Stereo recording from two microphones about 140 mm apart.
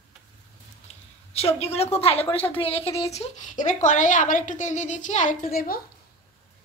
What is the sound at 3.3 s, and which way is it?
A woman's voice, 60° left (ahead or behind).